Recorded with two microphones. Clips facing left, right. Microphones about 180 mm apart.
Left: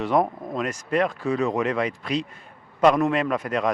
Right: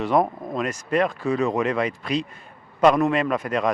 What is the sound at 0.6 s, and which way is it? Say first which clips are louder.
Speech: right 1 dB; 15° right (ahead or behind).